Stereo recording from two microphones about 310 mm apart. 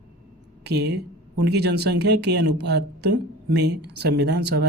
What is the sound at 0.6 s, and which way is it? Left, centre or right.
Speech, right.